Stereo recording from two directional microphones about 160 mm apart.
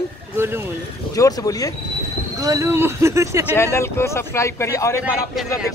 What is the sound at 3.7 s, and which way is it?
Speech, 15° left (ahead or behind).